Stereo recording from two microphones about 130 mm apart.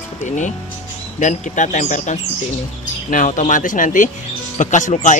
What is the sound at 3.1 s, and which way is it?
Speech, 80° left.